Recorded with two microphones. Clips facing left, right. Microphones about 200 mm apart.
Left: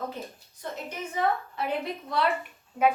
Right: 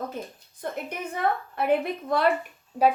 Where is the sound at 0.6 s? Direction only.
55° right (ahead or behind).